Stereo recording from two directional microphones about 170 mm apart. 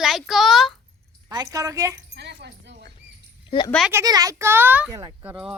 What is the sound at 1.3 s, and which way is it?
Speech, 20° right (ahead or behind).